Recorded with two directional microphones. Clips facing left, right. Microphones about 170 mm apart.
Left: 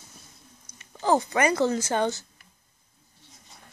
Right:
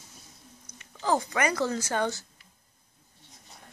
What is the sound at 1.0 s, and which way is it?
Speech, 30° left (ahead or behind).